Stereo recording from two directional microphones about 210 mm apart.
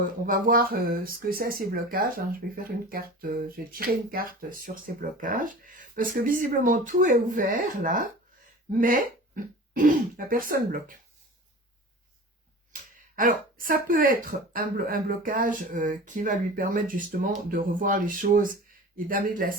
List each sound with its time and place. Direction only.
0.3 s speech: 40° right (ahead or behind)
12.7 s speech: 40° right (ahead or behind)